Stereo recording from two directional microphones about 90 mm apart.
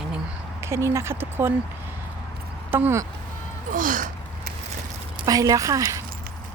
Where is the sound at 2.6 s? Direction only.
25° right (ahead or behind).